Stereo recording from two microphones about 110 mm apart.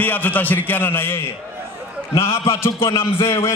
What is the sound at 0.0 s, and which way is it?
A man's voice, 15° left (ahead or behind).